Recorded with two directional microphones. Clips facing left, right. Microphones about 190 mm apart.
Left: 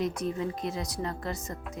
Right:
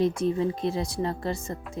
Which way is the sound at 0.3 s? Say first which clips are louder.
Right 6 dB; 30° right (ahead or behind).